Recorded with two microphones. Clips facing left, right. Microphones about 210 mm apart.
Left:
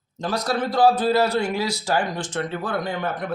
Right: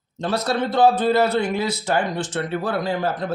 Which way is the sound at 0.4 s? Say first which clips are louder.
Right 1 dB; 25° right (ahead or behind).